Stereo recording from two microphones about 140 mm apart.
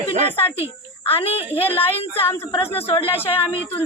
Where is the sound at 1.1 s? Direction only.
45° left (ahead or behind).